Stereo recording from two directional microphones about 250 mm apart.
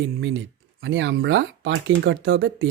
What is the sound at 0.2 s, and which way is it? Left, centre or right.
Speech, right.